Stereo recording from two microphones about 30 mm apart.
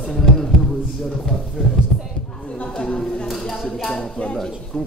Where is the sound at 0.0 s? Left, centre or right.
Centre.